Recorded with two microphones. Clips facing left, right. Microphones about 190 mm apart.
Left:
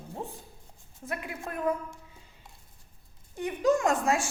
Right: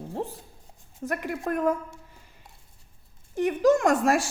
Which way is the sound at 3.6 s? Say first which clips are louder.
Right 4 dB; 75° right (ahead or behind).